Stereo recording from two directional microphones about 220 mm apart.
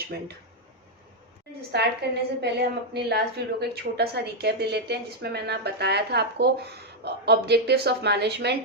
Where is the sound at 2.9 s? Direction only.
45° right (ahead or behind).